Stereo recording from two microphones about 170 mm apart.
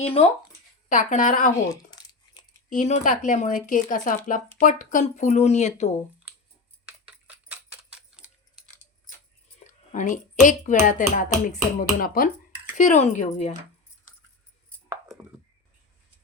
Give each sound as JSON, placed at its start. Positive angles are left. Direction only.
{"t": 0.0, "sound": "speech", "side_deg": 35}
{"t": 0.9, "sound": "speech", "side_deg": 50}
{"t": 1.7, "sound": "crumpling", "side_deg": 25}
{"t": 2.6, "sound": "speech", "side_deg": 45}
{"t": 7.3, "sound": "a sound", "side_deg": -5}
{"t": 9.9, "sound": "speech", "side_deg": 45}